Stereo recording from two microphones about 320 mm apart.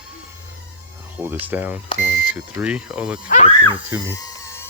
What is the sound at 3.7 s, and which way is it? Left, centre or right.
Speech, centre.